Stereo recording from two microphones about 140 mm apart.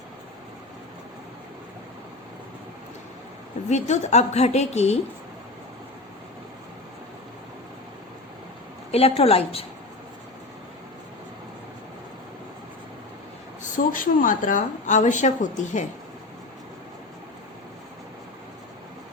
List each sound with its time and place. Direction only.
3.7 s a woman's voice: 55° left (ahead or behind)
8.9 s a woman's voice: 45° left (ahead or behind)
13.6 s a woman's voice: 75° left (ahead or behind)